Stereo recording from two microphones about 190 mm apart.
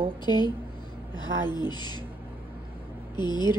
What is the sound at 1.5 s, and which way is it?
Speech, 20° left (ahead or behind).